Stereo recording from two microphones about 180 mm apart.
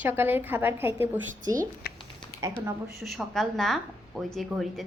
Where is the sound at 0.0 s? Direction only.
10° right (ahead or behind).